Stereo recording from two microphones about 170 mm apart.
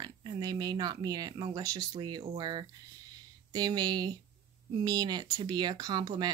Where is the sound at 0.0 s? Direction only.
25° right (ahead or behind).